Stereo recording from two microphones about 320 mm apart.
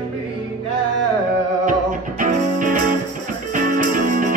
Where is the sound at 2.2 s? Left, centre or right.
Right.